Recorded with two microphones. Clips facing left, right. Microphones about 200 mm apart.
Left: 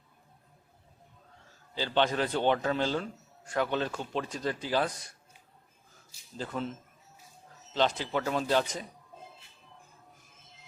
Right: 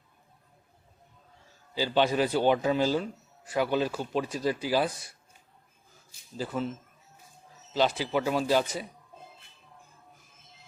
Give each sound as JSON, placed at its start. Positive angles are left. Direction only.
{"t": 1.7, "sound": "a man's voice", "side_deg": -10}
{"t": 6.3, "sound": "a man's voice", "side_deg": -5}